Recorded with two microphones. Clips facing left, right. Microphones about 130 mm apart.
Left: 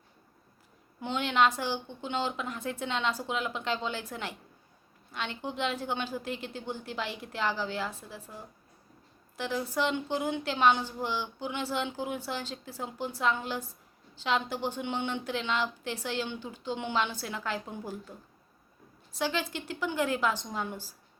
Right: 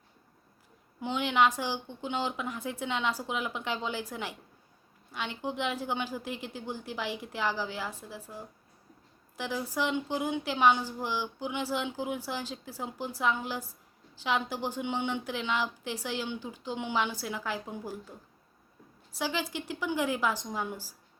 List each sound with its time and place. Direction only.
1.0 s speech: 10° right (ahead or behind)
19.1 s speech: 10° right (ahead or behind)